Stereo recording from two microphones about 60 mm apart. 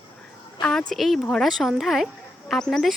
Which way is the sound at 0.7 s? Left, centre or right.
Centre.